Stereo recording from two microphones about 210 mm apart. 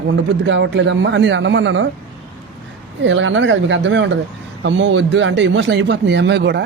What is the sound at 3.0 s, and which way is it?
Speech, 65° right (ahead or behind).